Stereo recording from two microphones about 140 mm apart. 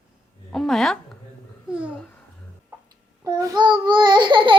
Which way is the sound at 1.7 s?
10° right (ahead or behind).